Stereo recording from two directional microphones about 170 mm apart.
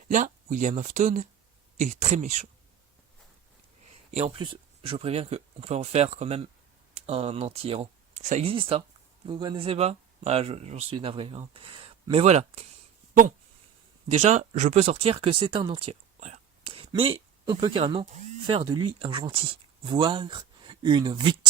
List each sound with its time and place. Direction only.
0.1 s speech: 45° right (ahead or behind)
4.1 s speech: 35° right (ahead or behind)
8.2 s speech: 45° right (ahead or behind)
8.4 s speech: 35° right (ahead or behind)
14.2 s speech: 40° right (ahead or behind); by 21.3 s 25° right (ahead or behind)